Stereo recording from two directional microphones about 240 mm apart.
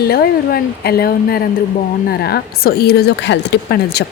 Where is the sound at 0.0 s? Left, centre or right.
Left.